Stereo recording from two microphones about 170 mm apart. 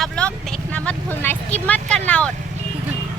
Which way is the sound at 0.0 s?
5° left (ahead or behind).